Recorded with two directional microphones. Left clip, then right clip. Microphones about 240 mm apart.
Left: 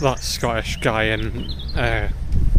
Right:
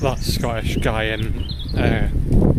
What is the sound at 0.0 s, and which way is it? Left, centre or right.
Speech, centre.